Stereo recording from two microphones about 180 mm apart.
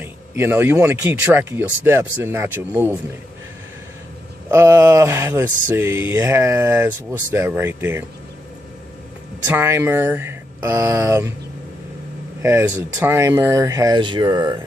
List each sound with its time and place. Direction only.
0.0 s speech: 15° right (ahead or behind)
4.5 s speech: 15° right (ahead or behind)
9.5 s speech: 15° right (ahead or behind)
12.4 s speech: 15° right (ahead or behind)